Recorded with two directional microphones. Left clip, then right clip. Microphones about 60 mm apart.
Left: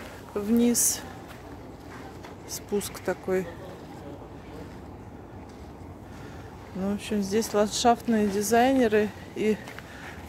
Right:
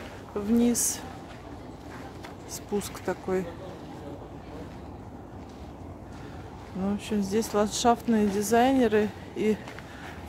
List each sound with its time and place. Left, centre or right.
0.6 s speech: left
2.5 s speech: centre
6.8 s speech: centre